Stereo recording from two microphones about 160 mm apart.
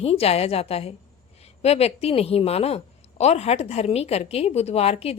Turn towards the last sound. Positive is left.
turn(degrees=40)  # may be behind; listen again after turning